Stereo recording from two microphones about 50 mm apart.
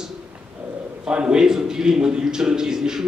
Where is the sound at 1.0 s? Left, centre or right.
Centre.